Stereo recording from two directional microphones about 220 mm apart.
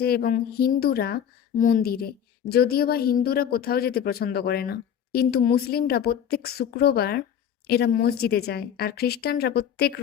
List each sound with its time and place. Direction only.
0.0 s speech: 45° left (ahead or behind)